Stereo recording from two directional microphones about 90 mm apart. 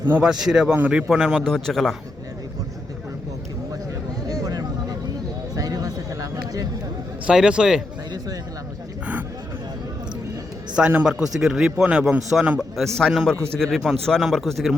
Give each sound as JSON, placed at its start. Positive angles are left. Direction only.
{"t": 0.2, "sound": "a man's voice", "side_deg": -5}
{"t": 0.7, "sound": "speech", "side_deg": -20}
{"t": 0.9, "sound": "a man's voice", "side_deg": -5}
{"t": 1.5, "sound": "speech", "side_deg": 5}
{"t": 4.3, "sound": "vehicle", "side_deg": -45}
{"t": 5.5, "sound": "a sound", "side_deg": -40}
{"t": 7.3, "sound": "a man's voice", "side_deg": -10}
{"t": 10.8, "sound": "a man's voice", "side_deg": -10}